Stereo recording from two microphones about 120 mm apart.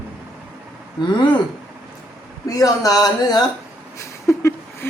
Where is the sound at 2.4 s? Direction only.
30° left (ahead or behind).